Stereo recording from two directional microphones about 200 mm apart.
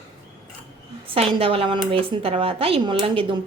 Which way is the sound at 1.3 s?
25° right (ahead or behind).